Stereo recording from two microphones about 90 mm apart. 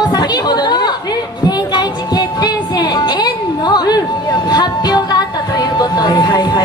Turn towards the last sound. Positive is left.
turn(degrees=50)  # may be behind; listen again after turning